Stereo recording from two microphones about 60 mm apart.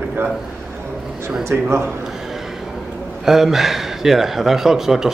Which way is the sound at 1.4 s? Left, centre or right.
Right.